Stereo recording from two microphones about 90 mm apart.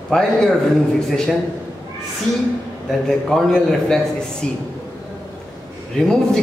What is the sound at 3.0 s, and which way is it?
A man's voice, 5° left (ahead or behind).